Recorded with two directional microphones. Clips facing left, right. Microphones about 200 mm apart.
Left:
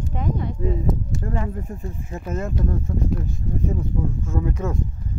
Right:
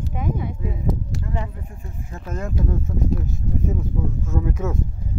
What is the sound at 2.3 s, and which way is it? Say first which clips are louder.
Speech: left 1 dB; centre (ahead or behind).